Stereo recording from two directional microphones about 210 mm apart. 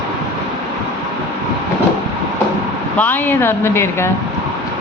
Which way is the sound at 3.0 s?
10° left (ahead or behind).